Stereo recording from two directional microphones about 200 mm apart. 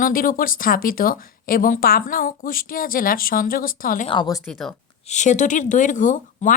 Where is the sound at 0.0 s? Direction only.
45° left (ahead or behind).